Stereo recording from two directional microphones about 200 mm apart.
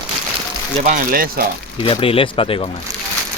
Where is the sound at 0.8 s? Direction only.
40° right (ahead or behind).